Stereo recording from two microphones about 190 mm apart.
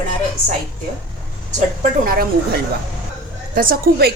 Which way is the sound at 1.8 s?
50° right (ahead or behind).